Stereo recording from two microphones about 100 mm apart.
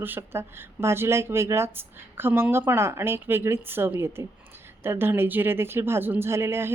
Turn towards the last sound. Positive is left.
turn(degrees=-25)  # may be behind; listen again after turning